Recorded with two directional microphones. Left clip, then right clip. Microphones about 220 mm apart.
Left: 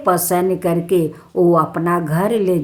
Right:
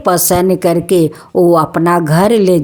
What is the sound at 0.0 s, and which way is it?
A woman's voice, 40° right (ahead or behind).